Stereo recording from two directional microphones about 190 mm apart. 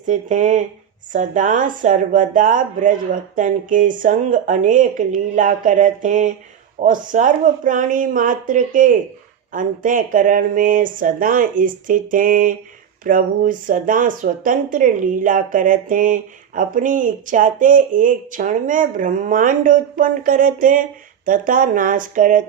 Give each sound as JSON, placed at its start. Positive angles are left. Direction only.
{"t": 0.1, "sound": "speech", "side_deg": -40}